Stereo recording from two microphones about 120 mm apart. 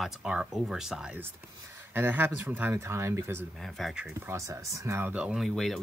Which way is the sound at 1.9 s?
15° right (ahead or behind).